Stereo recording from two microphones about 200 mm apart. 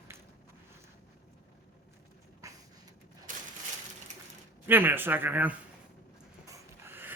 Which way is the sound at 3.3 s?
40° right (ahead or behind).